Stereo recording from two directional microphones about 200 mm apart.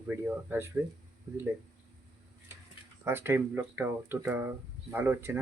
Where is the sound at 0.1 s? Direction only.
10° right (ahead or behind).